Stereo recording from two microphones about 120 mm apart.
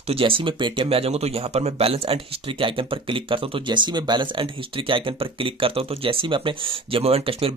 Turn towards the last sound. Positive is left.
turn(degrees=-55)  # may be behind; listen again after turning